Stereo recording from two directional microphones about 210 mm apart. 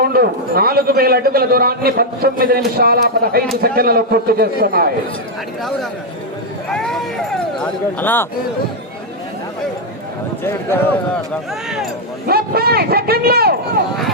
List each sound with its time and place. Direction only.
0.0 s a man's voice: 45° right (ahead or behind)
6.7 s speech: 5° left (ahead or behind)
10.4 s speech: 10° left (ahead or behind)
12.3 s a man's voice: 45° right (ahead or behind)